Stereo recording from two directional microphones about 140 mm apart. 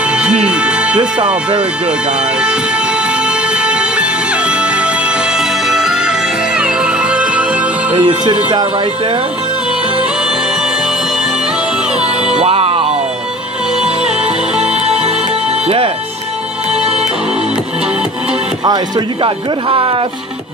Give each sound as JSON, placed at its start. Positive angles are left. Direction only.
{"t": 0.0, "sound": "music", "side_deg": -5}
{"t": 3.3, "sound": "music", "side_deg": -5}
{"t": 7.9, "sound": "speech", "side_deg": -35}
{"t": 12.3, "sound": "music", "side_deg": -45}
{"t": 13.7, "sound": "music", "side_deg": -5}
{"t": 15.6, "sound": "music", "side_deg": -40}
{"t": 16.7, "sound": "music", "side_deg": -5}
{"t": 18.6, "sound": "speech", "side_deg": -30}